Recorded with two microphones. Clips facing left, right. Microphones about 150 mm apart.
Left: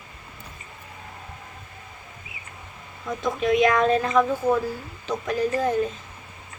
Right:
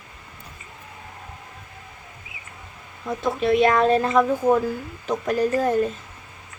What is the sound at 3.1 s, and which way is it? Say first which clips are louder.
Speech: right 2 dB; 35° right (ahead or behind).